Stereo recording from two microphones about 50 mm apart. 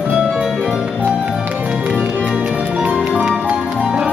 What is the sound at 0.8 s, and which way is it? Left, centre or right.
Music, right.